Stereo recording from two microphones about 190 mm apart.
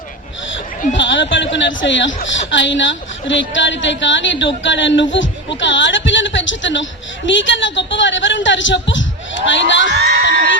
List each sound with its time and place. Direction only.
0.5 s speech: 75° left (ahead or behind)
9.9 s speech: 65° right (ahead or behind)